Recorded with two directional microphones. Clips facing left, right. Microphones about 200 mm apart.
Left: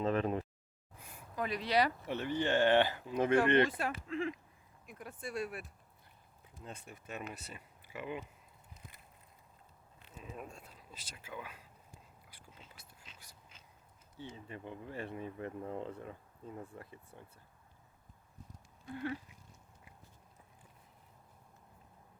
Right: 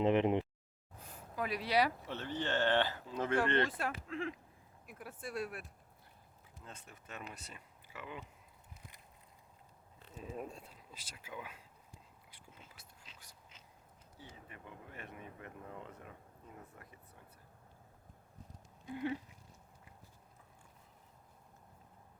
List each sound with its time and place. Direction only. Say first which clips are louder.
0.0 s speech: right 3 dB; 20° right (ahead or behind)
0.9 s a sound: right 2 dB; 10° left (ahead or behind)
1.4 s speech: left 1 dB; 5° right (ahead or behind)
2.0 s speech: left 5 dB; 10° left (ahead or behind)
3.7 s speech: left 2 dB; centre (ahead or behind)
6.7 s speech: left 5 dB; 10° left (ahead or behind)
7.9 s speech: left 6 dB; 15° left (ahead or behind)
10.2 s speech: right 3 dB; 35° right (ahead or behind)
10.9 s speech: left 1 dB; 10° right (ahead or behind)
12.8 s whispering: left 1 dB; centre (ahead or behind)
13.5 s a sound: even; 20° right (ahead or behind)
14.2 s speech: left 8 dB; 25° left (ahead or behind)
18.9 s speech: right 1 dB; 15° right (ahead or behind)